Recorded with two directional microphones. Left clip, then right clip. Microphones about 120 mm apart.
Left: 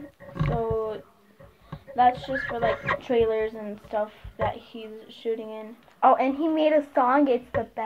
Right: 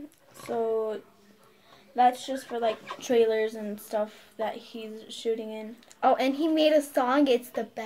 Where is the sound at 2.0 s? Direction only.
10° right (ahead or behind).